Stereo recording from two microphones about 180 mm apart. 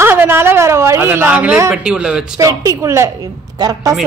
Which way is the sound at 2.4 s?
15° right (ahead or behind).